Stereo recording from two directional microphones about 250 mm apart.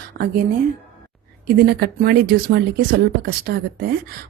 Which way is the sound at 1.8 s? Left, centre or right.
Right.